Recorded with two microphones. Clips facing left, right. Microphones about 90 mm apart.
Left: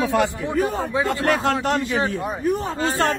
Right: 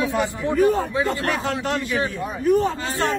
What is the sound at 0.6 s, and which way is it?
Speech, 20° left (ahead or behind).